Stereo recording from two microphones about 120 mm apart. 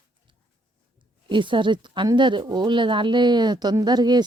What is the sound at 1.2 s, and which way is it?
Speech, 40° right (ahead or behind).